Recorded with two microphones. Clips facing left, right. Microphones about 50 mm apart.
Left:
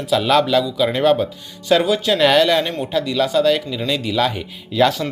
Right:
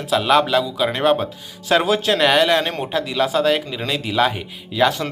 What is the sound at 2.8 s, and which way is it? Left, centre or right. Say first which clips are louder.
Speech: left 1 dB; right.